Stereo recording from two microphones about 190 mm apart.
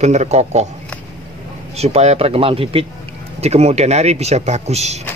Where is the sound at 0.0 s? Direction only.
35° right (ahead or behind).